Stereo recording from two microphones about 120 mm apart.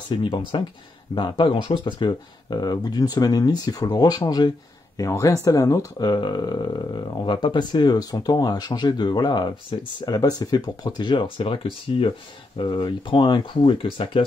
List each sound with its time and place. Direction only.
0.1 s speech: 45° left (ahead or behind)